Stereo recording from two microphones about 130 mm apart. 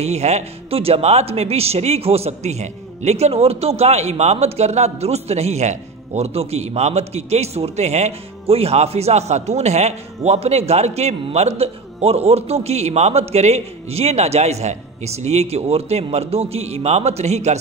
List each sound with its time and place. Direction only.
0.0 s a man's voice: 55° right (ahead or behind)